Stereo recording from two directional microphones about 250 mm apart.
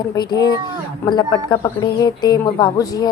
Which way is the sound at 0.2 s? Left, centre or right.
Centre.